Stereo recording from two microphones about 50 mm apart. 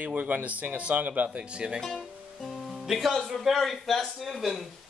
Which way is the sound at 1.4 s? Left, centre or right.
Centre.